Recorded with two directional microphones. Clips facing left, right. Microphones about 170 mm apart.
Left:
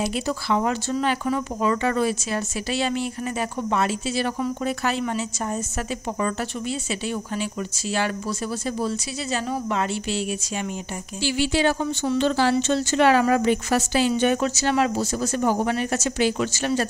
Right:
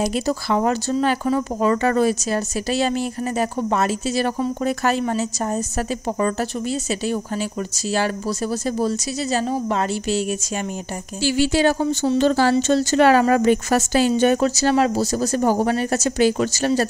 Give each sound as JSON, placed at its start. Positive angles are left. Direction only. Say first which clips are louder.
{"t": 0.0, "sound": "a woman's voice", "louder": "right 4 dB", "side_deg": -40}
{"t": 8.6, "sound": "a woman's voice", "louder": "right 4 dB", "side_deg": -40}
{"t": 11.2, "sound": "a woman's voice", "louder": "right 4 dB", "side_deg": -40}